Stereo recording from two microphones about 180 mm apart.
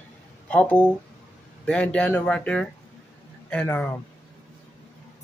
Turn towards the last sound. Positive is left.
turn(degrees=10)  # may be behind; listen again after turning